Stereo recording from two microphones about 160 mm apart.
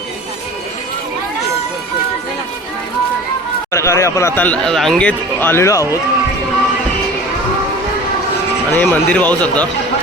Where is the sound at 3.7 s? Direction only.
20° left (ahead or behind).